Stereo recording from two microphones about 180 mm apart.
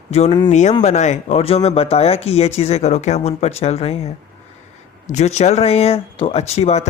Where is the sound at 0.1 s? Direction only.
35° left (ahead or behind).